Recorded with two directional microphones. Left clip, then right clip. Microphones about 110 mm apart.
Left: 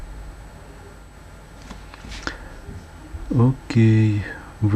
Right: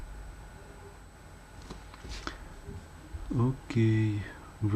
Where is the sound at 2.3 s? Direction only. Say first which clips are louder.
Left 11 dB; 45° left (ahead or behind).